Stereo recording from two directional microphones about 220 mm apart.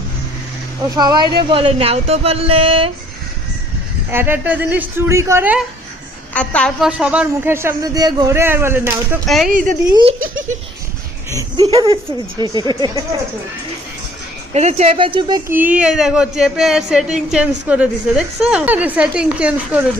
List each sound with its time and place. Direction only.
0.9 s speech: 20° right (ahead or behind)
4.1 s a woman's voice: 10° right (ahead or behind)
6.3 s a woman's voice: 5° left (ahead or behind); by 9.1 s 10° right (ahead or behind)
9.2 s speech: centre (ahead or behind)
9.5 s speech: 40° right (ahead or behind)
9.9 s speech: 20° right (ahead or behind)
10.2 s speech: 65° right (ahead or behind)
11.3 s speech: 20° right (ahead or behind)
14.5 s speech: 30° right (ahead or behind)
15.4 s speech: 10° right (ahead or behind)